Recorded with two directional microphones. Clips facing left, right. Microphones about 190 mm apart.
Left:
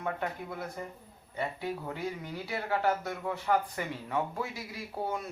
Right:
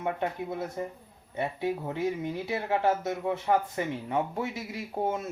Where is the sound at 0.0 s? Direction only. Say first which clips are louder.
Right 4 dB; 25° right (ahead or behind).